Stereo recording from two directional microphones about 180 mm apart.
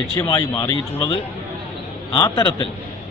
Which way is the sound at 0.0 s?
20° left (ahead or behind).